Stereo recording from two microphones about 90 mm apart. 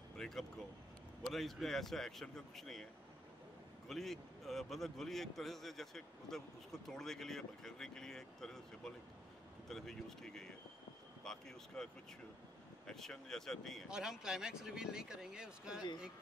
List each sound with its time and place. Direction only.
0.2 s a man's voice: 5° left (ahead or behind)
3.9 s a man's voice: 5° left (ahead or behind)
13.8 s speech: 5° right (ahead or behind)